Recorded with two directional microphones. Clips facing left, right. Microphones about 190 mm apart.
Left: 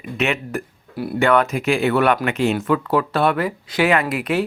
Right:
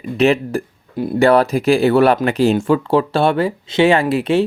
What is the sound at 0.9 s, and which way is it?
Speech, 20° right (ahead or behind).